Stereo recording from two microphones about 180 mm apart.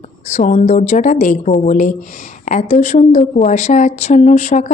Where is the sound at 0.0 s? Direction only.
40° left (ahead or behind).